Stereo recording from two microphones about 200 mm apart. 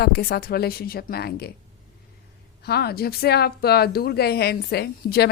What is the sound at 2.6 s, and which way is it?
A woman's voice, 55° left (ahead or behind).